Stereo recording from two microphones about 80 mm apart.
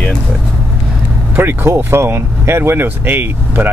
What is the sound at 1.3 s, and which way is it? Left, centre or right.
Speech, right.